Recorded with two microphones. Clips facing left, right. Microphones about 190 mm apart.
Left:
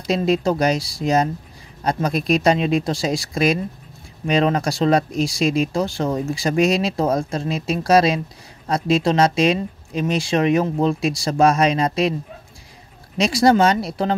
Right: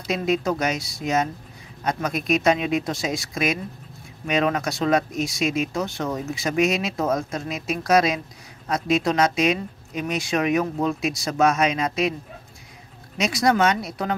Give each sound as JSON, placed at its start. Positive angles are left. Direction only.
{"t": 0.1, "sound": "speech", "side_deg": 30}
{"t": 13.2, "sound": "speech", "side_deg": 30}